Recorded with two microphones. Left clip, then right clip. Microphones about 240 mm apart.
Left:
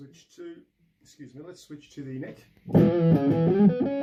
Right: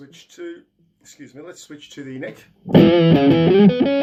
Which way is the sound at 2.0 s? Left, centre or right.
Centre.